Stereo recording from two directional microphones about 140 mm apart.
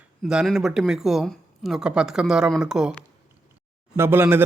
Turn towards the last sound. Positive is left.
turn(degrees=-15)  # may be behind; listen again after turning